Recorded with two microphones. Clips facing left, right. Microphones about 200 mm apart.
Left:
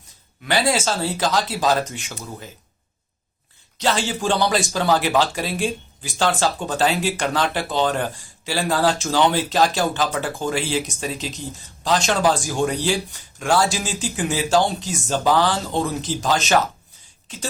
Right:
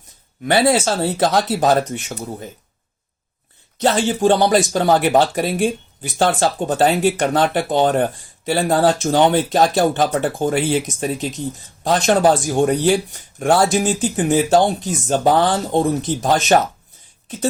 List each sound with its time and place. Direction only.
0.4 s speech: 60° right (ahead or behind)
3.8 s speech: 55° right (ahead or behind)